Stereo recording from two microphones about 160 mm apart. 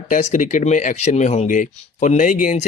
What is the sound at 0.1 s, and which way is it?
Speech, 50° left (ahead or behind).